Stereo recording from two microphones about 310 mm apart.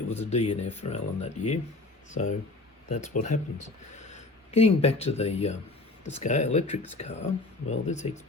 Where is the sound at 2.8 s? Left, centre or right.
Left.